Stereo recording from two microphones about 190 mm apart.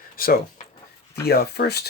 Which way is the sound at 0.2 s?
50° left (ahead or behind).